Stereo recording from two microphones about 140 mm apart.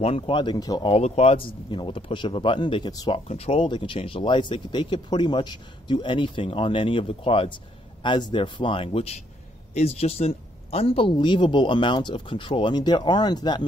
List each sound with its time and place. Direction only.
0.0 s speech: 40° left (ahead or behind)
0.8 s speech: 45° left (ahead or behind); by 3.1 s 30° left (ahead or behind)
3.1 s speech: 45° left (ahead or behind)